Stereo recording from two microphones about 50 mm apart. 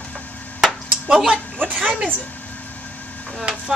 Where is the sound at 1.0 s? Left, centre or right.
Centre.